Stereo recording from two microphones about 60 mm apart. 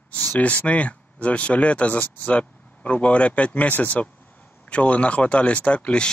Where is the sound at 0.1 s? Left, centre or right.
Left.